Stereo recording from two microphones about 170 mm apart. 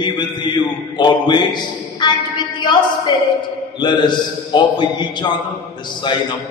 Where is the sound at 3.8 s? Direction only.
25° left (ahead or behind).